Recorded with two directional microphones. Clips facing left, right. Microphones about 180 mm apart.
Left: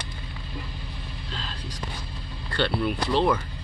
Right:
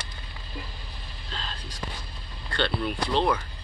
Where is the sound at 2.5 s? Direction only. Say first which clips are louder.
Left 2 dB; 10° left (ahead or behind).